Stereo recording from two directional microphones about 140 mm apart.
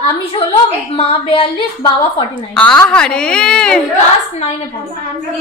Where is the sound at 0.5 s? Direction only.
45° left (ahead or behind).